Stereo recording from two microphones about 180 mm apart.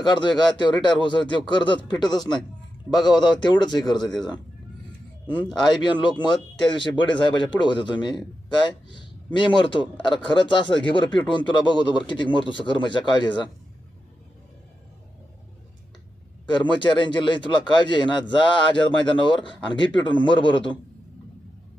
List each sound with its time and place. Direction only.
0.1 s a man's voice: 25° left (ahead or behind)
5.6 s a man's voice: 25° left (ahead or behind)
16.8 s a man's voice: 25° left (ahead or behind)